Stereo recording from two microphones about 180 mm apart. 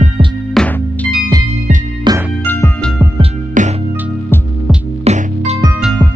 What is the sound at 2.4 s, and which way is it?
Music, 10° left (ahead or behind).